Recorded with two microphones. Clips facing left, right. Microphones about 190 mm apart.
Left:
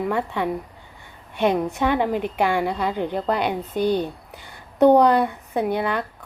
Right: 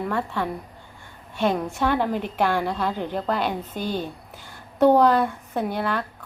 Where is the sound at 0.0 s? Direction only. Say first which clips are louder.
Left 3 dB; 15° left (ahead or behind).